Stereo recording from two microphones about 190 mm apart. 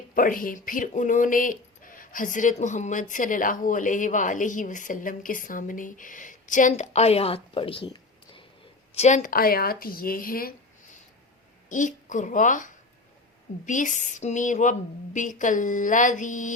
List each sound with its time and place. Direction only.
0.1 s speech: 45° left (ahead or behind); by 8.4 s 25° left (ahead or behind)
9.0 s speech: 40° left (ahead or behind)
11.7 s speech: 40° left (ahead or behind)